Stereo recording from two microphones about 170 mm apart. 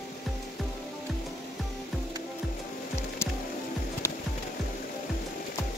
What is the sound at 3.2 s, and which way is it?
Music, 15° left (ahead or behind).